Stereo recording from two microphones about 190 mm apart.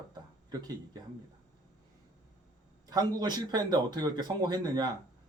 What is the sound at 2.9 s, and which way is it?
Speech, 20° right (ahead or behind).